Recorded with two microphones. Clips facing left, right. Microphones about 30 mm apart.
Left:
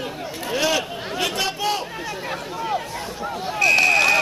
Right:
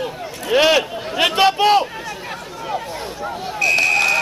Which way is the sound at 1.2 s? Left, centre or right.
Right.